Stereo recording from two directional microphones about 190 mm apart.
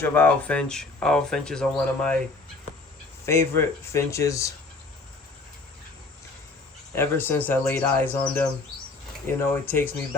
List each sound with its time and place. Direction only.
0.0 s speech: 10° left (ahead or behind)
3.2 s speech: 15° left (ahead or behind)
6.9 s speech: 10° left (ahead or behind)